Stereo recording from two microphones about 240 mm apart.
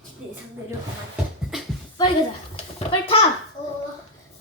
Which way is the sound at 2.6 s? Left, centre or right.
Left.